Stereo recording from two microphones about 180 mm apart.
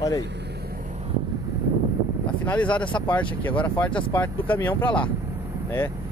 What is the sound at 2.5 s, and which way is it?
Speech, 10° left (ahead or behind).